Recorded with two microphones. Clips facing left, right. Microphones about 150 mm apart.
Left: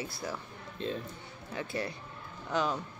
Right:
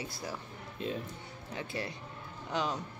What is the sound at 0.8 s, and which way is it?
Speech, 10° right (ahead or behind).